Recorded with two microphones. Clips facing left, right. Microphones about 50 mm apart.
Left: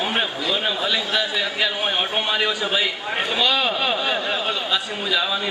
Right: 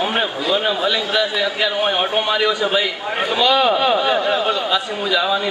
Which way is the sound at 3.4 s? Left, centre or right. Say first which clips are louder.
Right 7 dB; right.